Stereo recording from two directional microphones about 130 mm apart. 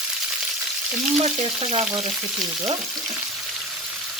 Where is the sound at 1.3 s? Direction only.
55° right (ahead or behind).